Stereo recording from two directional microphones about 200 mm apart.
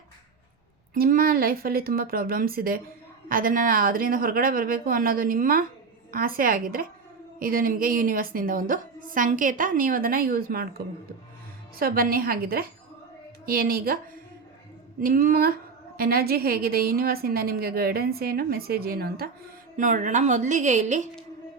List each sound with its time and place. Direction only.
0.9 s a woman's voice: 45° right (ahead or behind)
15.0 s a woman's voice: 45° right (ahead or behind)
19.7 s a woman's voice: 40° right (ahead or behind)